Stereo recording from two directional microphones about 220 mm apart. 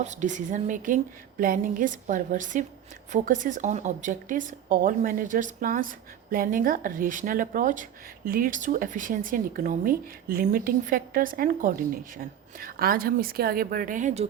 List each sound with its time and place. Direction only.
0.0 s speech: 35° right (ahead or behind)